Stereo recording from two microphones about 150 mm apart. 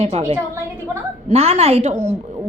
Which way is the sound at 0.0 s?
45° right (ahead or behind).